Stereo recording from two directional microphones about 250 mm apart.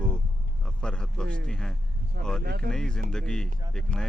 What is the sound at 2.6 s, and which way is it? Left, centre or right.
Speech, centre.